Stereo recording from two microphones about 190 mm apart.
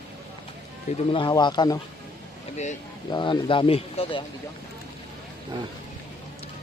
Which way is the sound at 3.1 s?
25° left (ahead or behind).